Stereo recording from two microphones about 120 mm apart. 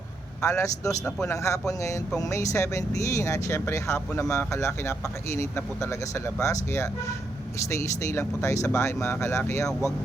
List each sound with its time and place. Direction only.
0.4 s speech: 25° left (ahead or behind)